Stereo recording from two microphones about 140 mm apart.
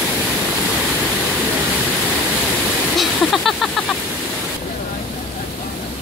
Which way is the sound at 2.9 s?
Centre (ahead or behind).